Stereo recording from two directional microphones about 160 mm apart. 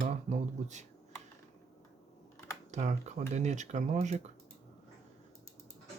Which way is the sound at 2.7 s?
45° right (ahead or behind).